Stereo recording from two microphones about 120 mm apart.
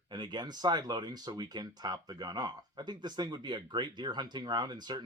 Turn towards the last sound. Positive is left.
turn(degrees=-35)  # may be behind; listen again after turning